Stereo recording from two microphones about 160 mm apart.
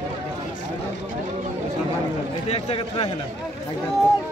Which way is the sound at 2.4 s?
40° left (ahead or behind).